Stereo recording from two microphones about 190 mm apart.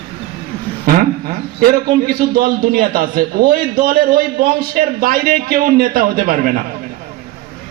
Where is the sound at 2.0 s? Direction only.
50° right (ahead or behind).